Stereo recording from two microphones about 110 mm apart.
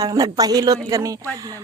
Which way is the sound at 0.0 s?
35° right (ahead or behind).